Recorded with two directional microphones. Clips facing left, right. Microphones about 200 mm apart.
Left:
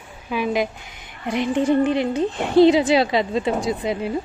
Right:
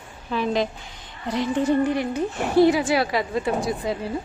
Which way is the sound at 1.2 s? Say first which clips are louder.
Left 2 dB; 20° left (ahead or behind).